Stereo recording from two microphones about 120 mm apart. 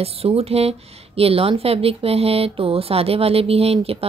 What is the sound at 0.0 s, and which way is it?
Speech, 55° right (ahead or behind).